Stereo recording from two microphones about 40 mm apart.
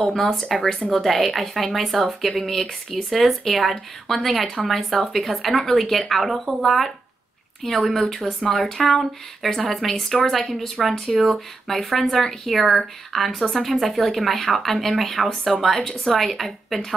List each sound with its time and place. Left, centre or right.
0.0 s speech: centre
15.8 s speech: centre
16.1 s speech: centre